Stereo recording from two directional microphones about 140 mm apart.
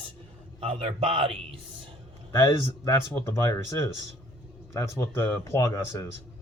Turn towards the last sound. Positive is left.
turn(degrees=20)  # may be behind; listen again after turning